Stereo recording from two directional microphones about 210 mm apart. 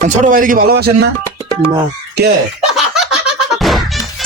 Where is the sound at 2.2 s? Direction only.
50° right (ahead or behind).